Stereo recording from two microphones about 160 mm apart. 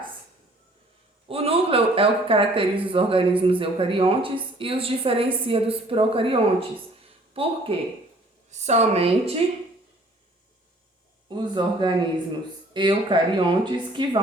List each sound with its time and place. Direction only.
1.3 s a woman's voice: 35° right (ahead or behind)
8.4 s a woman's voice: 45° right (ahead or behind)
11.3 s speech: 30° right (ahead or behind)